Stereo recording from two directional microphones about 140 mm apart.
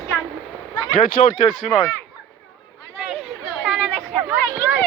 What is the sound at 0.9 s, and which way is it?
Speech, 75° left (ahead or behind).